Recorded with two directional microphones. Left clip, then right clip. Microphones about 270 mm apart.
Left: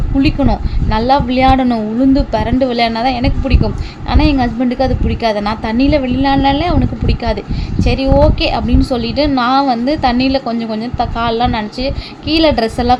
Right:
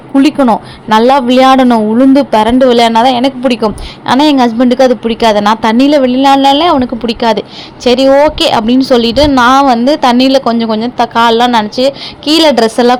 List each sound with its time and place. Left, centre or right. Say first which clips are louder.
0.2 s a woman's voice: right 7 dB; centre